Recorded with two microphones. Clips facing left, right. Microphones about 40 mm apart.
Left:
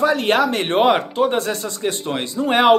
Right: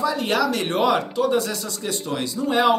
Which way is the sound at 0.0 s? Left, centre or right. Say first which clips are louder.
Left 5 dB; left.